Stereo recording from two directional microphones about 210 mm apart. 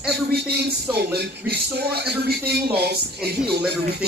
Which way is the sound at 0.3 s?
50° right (ahead or behind).